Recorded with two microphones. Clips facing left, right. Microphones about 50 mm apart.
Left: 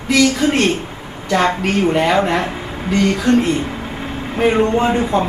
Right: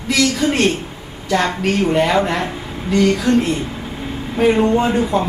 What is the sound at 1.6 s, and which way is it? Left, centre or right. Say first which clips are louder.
Speech: even; centre.